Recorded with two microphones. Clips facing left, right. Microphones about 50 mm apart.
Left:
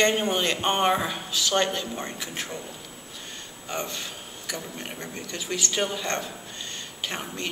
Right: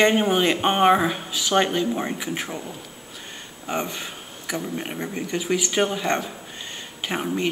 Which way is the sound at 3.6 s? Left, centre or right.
Centre.